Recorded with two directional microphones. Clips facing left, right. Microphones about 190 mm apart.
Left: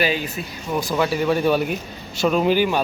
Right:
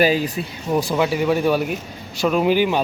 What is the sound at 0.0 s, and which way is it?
Speech, 35° right (ahead or behind).